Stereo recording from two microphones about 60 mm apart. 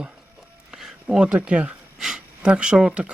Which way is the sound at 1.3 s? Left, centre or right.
Right.